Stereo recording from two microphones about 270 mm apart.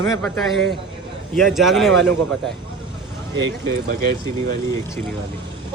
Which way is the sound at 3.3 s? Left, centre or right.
Right.